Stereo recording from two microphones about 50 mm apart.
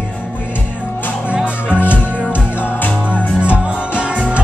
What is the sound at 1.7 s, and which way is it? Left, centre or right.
Music, left.